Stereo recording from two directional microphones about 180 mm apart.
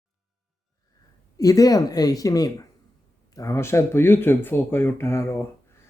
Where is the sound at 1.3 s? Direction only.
20° left (ahead or behind).